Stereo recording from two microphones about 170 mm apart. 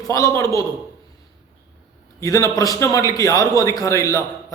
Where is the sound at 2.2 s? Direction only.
20° left (ahead or behind).